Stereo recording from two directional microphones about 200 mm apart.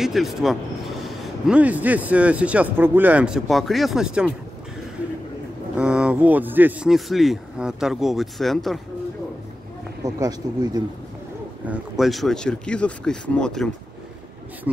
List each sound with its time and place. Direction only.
0.0 s speech: centre (ahead or behind)
5.8 s speech: 5° right (ahead or behind)
10.0 s speech: 20° right (ahead or behind)
11.6 s speech: 5° right (ahead or behind)